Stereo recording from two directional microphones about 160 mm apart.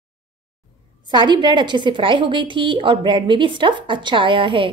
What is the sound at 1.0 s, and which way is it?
A woman's voice, 30° right (ahead or behind).